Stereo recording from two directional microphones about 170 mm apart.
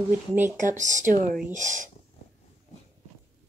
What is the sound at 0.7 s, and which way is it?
Speech, 45° right (ahead or behind).